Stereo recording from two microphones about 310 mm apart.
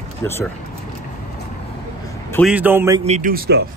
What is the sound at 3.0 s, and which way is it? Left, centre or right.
Speech, right.